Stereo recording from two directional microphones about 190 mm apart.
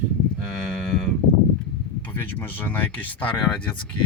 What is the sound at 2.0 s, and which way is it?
Speech, 10° left (ahead or behind).